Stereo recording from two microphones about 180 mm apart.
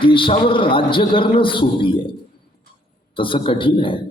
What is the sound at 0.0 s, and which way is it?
A man's voice, 30° left (ahead or behind).